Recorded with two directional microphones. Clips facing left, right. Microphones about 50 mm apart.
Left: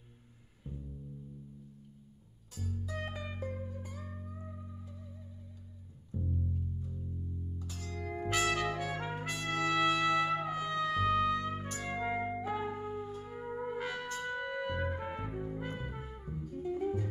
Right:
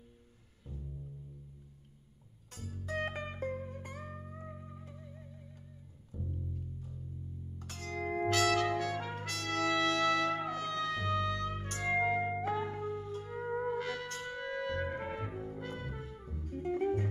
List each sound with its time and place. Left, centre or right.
0.7 s music: centre
2.5 s music: right
6.1 s music: left
7.5 s music: right
8.3 s trumpet: centre
11.9 s music: left
14.4 s music: centre
15.0 s trumpet: centre
15.3 s music: centre
16.4 s music: right